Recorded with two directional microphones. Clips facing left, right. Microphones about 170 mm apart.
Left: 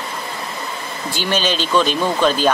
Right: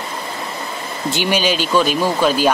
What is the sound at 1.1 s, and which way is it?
Speech, 15° right (ahead or behind).